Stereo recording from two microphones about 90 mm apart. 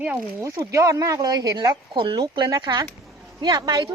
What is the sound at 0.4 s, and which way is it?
A woman's voice, 35° right (ahead or behind).